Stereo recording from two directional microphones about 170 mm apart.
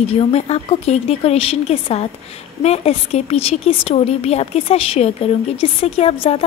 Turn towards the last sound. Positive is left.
turn(degrees=35)  # may be behind; listen again after turning